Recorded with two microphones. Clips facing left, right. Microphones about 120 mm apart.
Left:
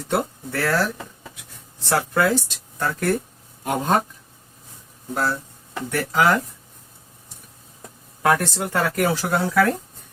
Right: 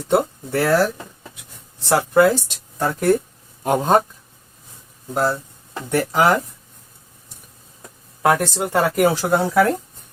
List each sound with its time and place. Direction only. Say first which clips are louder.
0.1 s speech: right 6 dB; 20° right (ahead or behind)
1.9 s speech: right 5 dB; 20° right (ahead or behind)
5.1 s speech: right 4 dB; 20° right (ahead or behind)
8.2 s speech: right 2 dB; 15° right (ahead or behind)